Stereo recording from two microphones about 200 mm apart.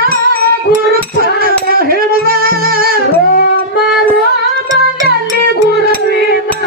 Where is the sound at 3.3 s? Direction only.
45° left (ahead or behind).